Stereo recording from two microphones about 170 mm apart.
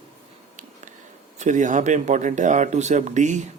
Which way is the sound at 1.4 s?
45° right (ahead or behind).